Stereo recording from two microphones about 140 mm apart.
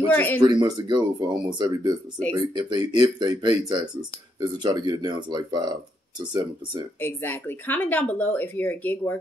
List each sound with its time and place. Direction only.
0.1 s speech: 15° left (ahead or behind)
0.4 s speech: 30° right (ahead or behind)
7.0 s speech: 15° left (ahead or behind)